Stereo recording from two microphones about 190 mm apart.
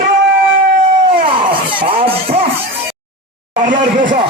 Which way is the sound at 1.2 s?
30° right (ahead or behind).